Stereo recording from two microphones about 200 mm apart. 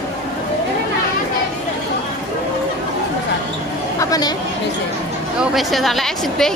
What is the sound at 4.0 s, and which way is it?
Chatter, 20° left (ahead or behind).